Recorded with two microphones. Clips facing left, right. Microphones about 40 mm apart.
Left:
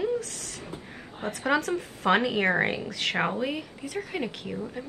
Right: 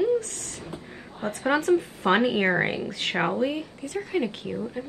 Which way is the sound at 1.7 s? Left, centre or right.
Centre.